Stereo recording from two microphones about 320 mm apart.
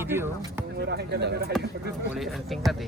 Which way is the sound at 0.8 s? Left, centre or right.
Right.